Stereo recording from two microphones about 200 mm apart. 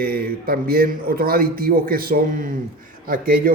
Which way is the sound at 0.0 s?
50° right (ahead or behind).